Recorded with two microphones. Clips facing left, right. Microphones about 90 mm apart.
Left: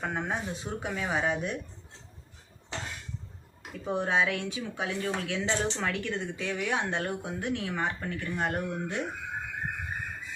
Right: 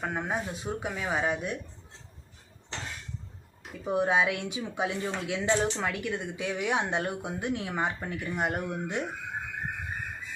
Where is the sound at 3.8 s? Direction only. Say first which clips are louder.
Right 2 dB; 10° right (ahead or behind).